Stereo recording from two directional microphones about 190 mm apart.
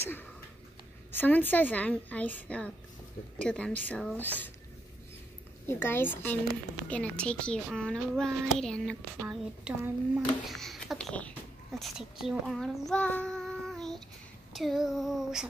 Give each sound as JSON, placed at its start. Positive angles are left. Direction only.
{"t": 0.0, "sound": "a woman's voice", "side_deg": 10}
{"t": 5.7, "sound": "a woman's voice", "side_deg": 10}